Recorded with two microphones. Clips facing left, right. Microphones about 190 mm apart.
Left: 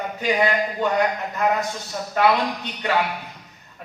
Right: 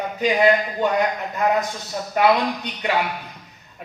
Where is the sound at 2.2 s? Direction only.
15° right (ahead or behind).